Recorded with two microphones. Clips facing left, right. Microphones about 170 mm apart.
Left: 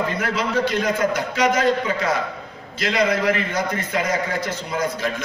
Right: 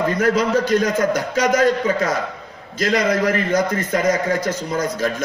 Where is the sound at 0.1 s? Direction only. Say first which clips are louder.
Right 6 dB; 45° right (ahead or behind).